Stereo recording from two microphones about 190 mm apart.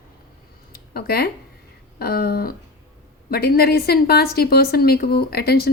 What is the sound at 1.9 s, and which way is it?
A woman's voice, 55° left (ahead or behind).